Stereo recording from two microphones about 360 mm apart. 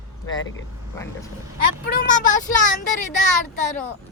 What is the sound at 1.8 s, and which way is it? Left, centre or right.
Speech, left.